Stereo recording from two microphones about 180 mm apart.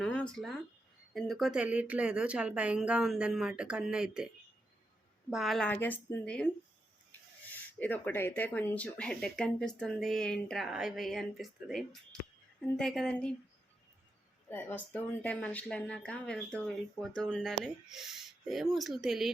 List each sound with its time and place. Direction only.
0.0 s a sound: 5° left (ahead or behind)
1.1 s speech: centre (ahead or behind)
5.3 s speech: centre (ahead or behind)
14.5 s speech: 10° left (ahead or behind)